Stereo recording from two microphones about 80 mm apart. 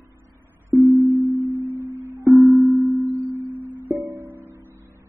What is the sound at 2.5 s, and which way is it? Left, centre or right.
Music, right.